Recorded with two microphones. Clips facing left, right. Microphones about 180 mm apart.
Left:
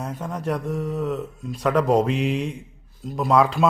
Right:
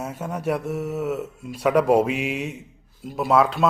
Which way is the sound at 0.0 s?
5° right (ahead or behind).